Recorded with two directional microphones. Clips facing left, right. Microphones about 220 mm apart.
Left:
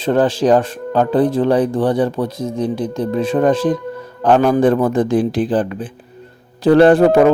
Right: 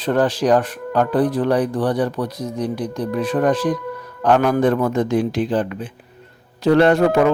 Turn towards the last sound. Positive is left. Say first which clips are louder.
# left 5 dB
turn(degrees=35)  # may be behind; listen again after turning